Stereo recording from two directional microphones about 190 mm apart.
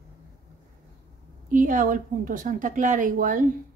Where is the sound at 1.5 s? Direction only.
45° right (ahead or behind).